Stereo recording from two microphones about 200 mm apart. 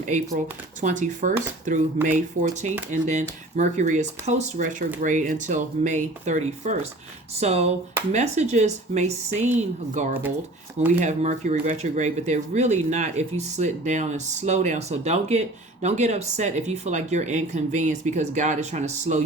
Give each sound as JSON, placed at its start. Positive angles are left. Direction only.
{"t": 0.8, "sound": "speech", "side_deg": -40}